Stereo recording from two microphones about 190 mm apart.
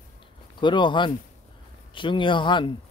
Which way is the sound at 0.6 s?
25° left (ahead or behind).